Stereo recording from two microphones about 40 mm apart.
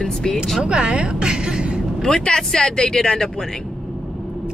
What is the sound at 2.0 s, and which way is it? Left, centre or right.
A woman's voice, left.